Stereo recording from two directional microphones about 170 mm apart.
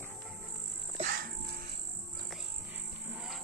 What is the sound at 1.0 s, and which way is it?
Music, 60° right (ahead or behind).